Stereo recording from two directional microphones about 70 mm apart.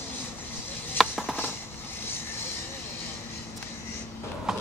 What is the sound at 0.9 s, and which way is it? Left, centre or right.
Music, centre.